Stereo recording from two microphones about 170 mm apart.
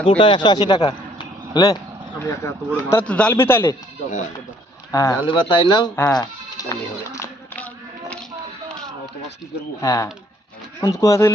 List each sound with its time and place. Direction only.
0.0 s speech: 30° left (ahead or behind); by 3.8 s 15° left (ahead or behind)
4.9 s speech: 20° left (ahead or behind)
6.0 s bleat: 20° left (ahead or behind)
9.8 s speech: 20° left (ahead or behind)